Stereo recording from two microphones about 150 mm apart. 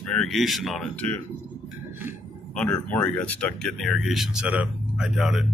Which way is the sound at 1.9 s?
15° right (ahead or behind).